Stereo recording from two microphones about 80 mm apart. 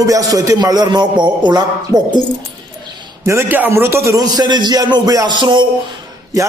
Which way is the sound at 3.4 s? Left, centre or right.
Right.